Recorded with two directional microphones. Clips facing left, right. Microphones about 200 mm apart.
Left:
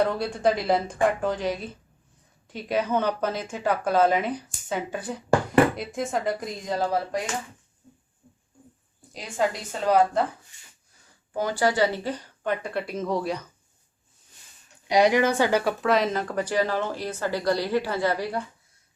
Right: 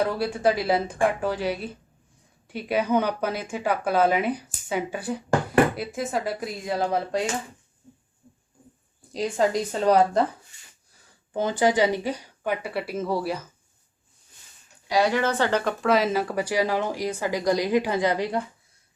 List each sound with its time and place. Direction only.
0.0 s speech: 5° right (ahead or behind)
9.1 s a woman's voice: 40° right (ahead or behind)
11.3 s speech: 20° right (ahead or behind); by 13.5 s 5° right (ahead or behind)
14.8 s speech: 20° left (ahead or behind); by 18.3 s 20° right (ahead or behind)